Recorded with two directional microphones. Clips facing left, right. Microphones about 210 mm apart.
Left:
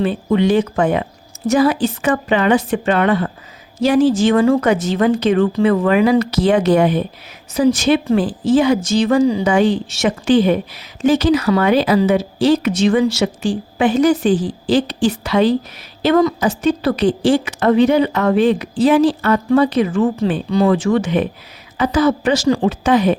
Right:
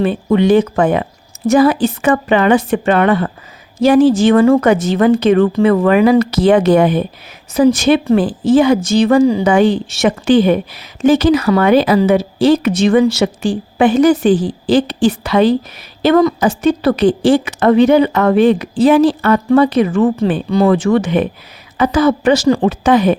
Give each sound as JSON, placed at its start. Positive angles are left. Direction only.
{"t": 0.0, "sound": "a woman's voice", "side_deg": -55}